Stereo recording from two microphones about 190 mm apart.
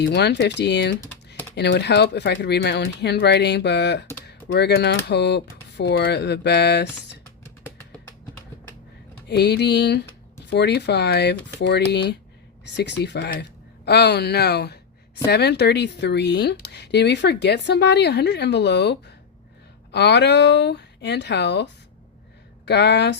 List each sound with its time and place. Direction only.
0.0 s speech: 60° left (ahead or behind)
9.2 s speech: 60° left (ahead or behind)